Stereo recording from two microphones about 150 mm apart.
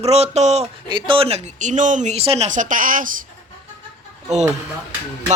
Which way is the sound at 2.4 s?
60° right (ahead or behind).